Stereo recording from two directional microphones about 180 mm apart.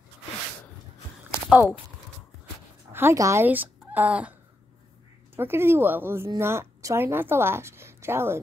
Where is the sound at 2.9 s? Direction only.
15° right (ahead or behind).